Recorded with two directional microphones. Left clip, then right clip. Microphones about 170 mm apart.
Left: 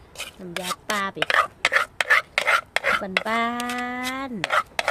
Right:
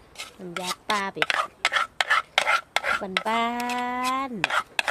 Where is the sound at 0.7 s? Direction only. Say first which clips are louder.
Left 1 dB; 5° right (ahead or behind).